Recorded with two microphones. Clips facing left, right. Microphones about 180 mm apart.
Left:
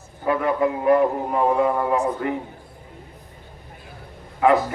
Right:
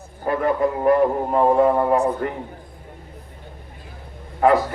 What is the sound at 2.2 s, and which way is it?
Speech, 45° right (ahead or behind).